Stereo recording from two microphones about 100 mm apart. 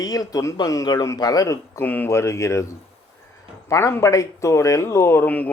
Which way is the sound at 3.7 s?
30° left (ahead or behind).